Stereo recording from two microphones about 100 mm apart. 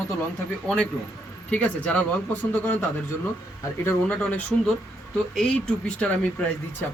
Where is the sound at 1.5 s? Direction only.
10° left (ahead or behind).